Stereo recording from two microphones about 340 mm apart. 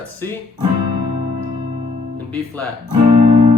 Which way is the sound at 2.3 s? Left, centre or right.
Centre.